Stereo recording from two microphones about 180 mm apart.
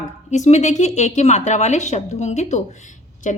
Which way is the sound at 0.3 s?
40° left (ahead or behind).